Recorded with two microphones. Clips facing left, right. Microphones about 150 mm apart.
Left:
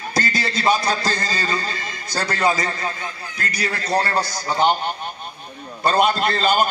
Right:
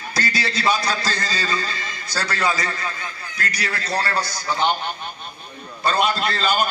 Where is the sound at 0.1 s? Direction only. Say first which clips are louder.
Left 1 dB; 50° left (ahead or behind).